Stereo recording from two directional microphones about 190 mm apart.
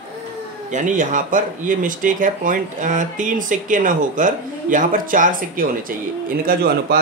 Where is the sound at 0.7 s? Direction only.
40° right (ahead or behind).